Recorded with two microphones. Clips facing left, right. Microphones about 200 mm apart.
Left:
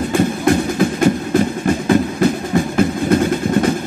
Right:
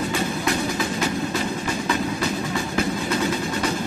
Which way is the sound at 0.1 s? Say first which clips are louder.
Left 9 dB; 55° left (ahead or behind).